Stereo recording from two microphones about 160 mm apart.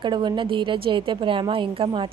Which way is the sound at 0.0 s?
30° right (ahead or behind).